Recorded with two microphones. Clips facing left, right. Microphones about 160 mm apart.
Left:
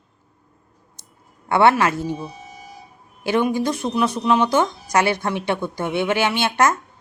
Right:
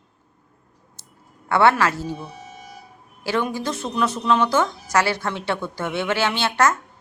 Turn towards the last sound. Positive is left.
turn(degrees=15)  # may be behind; listen again after turning